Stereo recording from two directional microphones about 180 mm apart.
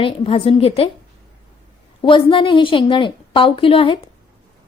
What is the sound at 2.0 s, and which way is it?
Speech, 25° left (ahead or behind).